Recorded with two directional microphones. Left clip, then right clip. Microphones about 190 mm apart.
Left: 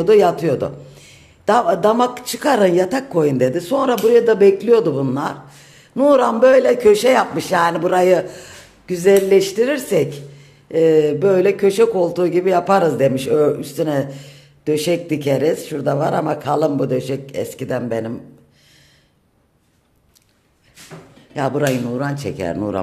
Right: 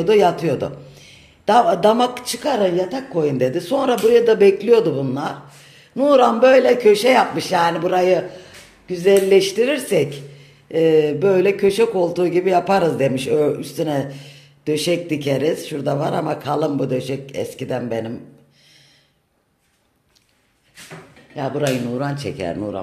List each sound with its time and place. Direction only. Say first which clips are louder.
0.0 s a man's voice: left 2 dB; centre (ahead or behind)
2.4 s a man's voice: left 4 dB; 15° left (ahead or behind)
9.0 s speech: left 1 dB; centre (ahead or behind)
21.4 s a man's voice: left 4 dB; 15° left (ahead or behind)
21.6 s speech: left 1 dB; centre (ahead or behind)